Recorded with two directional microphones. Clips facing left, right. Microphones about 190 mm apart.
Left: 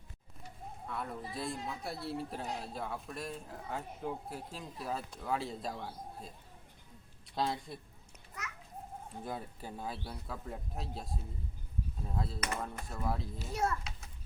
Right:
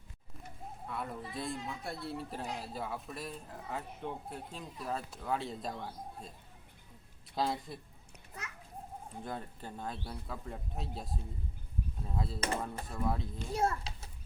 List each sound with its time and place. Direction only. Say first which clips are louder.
0.9 s speech: even; centre (ahead or behind)
7.3 s speech: right 1 dB; centre (ahead or behind)
9.2 s speech: left 1 dB; 5° left (ahead or behind)
13.5 s a child's voice: right 2 dB; 30° right (ahead or behind)